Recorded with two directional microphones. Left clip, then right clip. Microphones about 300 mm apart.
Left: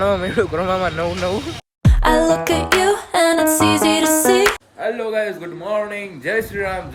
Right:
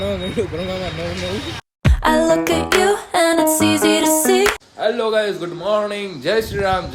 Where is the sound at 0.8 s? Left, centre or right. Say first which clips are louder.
Left 5 dB; centre.